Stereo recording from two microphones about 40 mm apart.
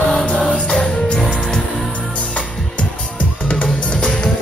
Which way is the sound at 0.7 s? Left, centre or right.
Centre.